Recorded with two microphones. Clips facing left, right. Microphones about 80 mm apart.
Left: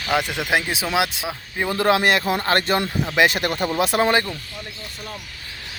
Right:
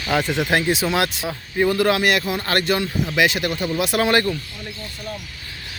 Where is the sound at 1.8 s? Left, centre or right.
Left.